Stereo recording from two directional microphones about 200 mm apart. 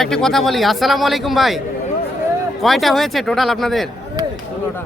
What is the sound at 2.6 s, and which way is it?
Speech, centre (ahead or behind).